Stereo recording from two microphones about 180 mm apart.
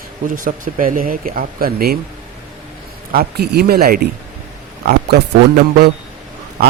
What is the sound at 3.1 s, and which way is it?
Speech, 60° right (ahead or behind).